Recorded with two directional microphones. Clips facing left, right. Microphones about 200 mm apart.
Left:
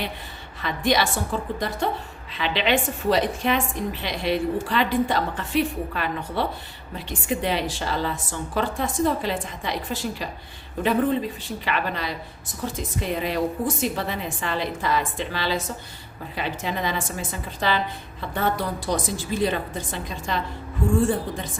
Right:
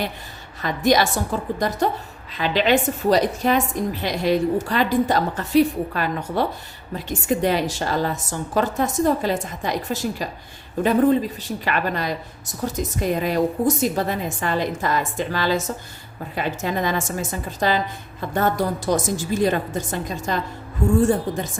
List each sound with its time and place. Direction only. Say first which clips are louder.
0.6 s a woman's voice: right 4 dB; 40° right (ahead or behind)
11.6 s a woman's voice: right 3 dB; 45° right (ahead or behind)